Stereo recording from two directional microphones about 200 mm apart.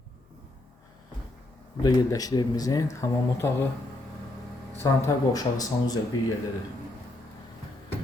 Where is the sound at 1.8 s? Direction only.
20° left (ahead or behind).